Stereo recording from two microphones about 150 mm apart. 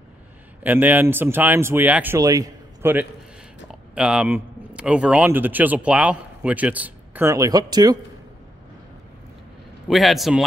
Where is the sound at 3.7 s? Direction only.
5° right (ahead or behind); by 7.9 s 25° right (ahead or behind).